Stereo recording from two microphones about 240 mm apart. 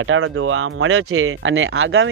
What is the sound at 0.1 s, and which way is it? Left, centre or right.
Speech, right.